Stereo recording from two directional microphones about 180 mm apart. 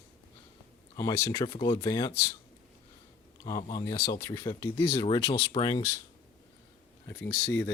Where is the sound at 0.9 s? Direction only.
20° left (ahead or behind).